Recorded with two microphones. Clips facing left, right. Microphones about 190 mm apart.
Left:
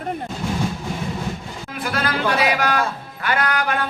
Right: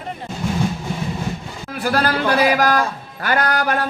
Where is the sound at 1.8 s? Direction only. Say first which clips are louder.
Right 4 dB; 40° right (ahead or behind).